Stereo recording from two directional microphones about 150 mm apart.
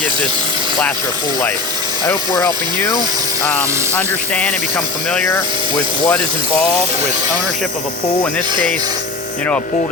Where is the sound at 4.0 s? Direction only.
10° left (ahead or behind).